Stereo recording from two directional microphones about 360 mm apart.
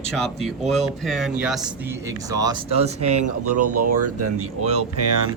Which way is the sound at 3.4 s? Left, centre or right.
Right.